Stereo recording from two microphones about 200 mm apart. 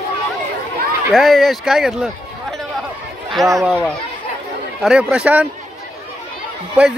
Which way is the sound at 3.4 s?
Centre (ahead or behind).